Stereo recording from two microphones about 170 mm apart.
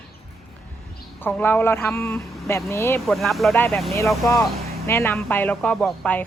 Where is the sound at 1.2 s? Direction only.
10° left (ahead or behind).